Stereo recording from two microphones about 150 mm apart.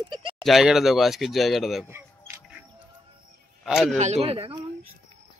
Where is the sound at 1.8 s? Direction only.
15° right (ahead or behind).